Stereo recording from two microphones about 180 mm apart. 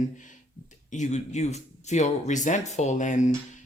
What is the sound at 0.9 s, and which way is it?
Speech, 40° left (ahead or behind).